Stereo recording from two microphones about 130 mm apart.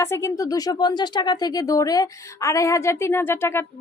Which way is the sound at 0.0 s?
20° left (ahead or behind).